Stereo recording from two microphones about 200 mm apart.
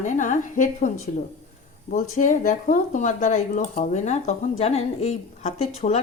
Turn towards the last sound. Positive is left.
turn(degrees=30)  # may be behind; listen again after turning